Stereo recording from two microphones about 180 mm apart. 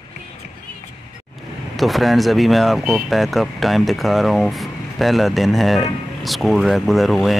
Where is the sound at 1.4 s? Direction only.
Centre (ahead or behind).